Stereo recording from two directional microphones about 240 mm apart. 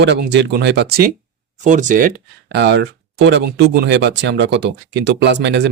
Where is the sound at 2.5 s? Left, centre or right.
Right.